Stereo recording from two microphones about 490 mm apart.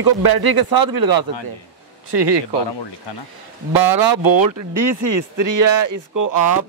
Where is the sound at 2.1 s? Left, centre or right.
Right.